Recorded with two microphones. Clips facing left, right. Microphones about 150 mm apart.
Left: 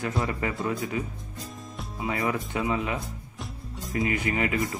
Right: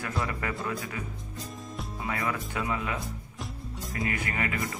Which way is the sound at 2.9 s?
Centre (ahead or behind).